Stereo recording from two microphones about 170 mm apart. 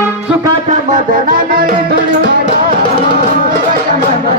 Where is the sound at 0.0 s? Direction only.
10° right (ahead or behind).